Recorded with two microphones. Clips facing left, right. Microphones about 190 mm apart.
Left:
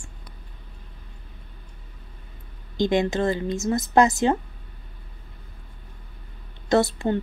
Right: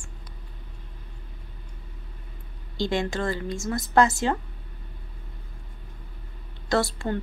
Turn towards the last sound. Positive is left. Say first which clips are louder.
# left 4 dB
turn(degrees=20)  # may be behind; listen again after turning